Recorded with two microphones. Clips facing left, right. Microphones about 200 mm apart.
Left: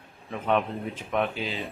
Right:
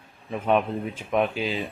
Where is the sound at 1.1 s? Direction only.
15° right (ahead or behind).